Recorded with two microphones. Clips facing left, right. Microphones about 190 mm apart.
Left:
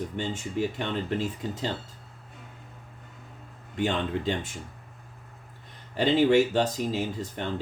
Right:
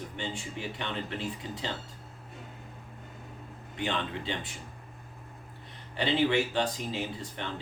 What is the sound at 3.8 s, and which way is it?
Speech, 45° left (ahead or behind).